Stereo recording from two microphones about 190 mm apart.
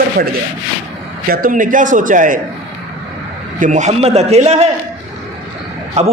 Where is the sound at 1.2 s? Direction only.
50° right (ahead or behind).